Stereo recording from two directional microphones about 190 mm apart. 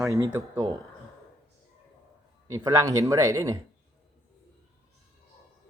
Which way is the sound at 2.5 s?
15° right (ahead or behind).